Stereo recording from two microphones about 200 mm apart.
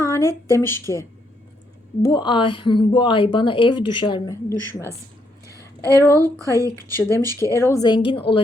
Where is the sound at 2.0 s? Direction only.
20° left (ahead or behind).